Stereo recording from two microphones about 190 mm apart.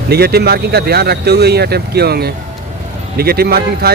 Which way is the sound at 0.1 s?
55° right (ahead or behind).